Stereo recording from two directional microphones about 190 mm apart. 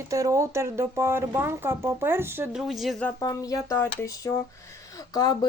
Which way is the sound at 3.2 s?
20° left (ahead or behind).